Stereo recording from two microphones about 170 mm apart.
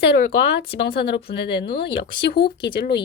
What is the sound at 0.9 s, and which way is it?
Speech, 70° left (ahead or behind).